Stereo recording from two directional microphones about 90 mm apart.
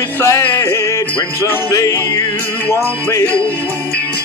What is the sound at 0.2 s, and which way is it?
Music, 25° left (ahead or behind).